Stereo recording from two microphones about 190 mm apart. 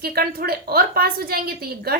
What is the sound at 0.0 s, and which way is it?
A woman's voice, 55° right (ahead or behind).